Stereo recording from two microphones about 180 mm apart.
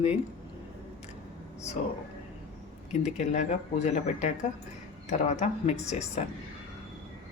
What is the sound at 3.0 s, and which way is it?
A woman's voice, 40° left (ahead or behind).